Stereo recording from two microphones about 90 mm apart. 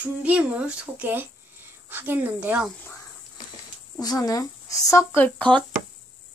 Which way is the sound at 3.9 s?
45° left (ahead or behind).